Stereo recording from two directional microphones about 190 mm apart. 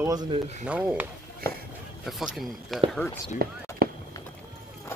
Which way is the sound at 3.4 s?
55° right (ahead or behind).